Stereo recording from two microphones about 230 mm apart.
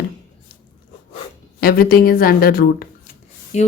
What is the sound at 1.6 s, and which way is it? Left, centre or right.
A woman's voice, left.